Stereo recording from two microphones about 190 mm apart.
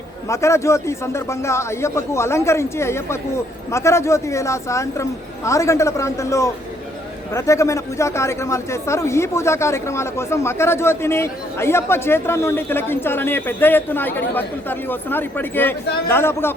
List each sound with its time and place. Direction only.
0.3 s speech: 15° left (ahead or behind)